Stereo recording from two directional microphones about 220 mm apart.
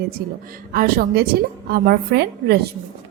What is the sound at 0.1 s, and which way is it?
A woman's voice, 40° right (ahead or behind).